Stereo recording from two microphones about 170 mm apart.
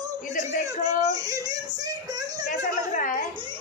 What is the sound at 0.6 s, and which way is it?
Whimper, 20° right (ahead or behind).